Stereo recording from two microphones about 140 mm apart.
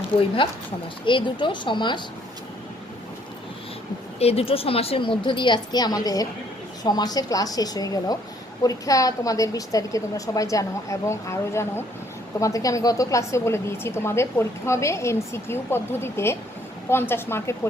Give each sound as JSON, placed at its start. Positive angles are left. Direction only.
{"t": 0.4, "sound": "a woman's voice", "side_deg": 40}
{"t": 4.2, "sound": "a woman's voice", "side_deg": 45}